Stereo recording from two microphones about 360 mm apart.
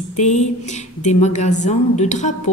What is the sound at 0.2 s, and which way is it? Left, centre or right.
A woman's voice, centre.